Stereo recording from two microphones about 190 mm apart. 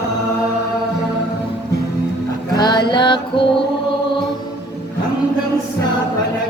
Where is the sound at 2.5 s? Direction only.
20° left (ahead or behind).